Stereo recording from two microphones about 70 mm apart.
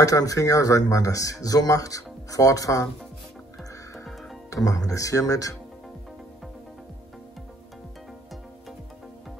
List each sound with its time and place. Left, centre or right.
0.0 s speech: left
4.6 s speech: left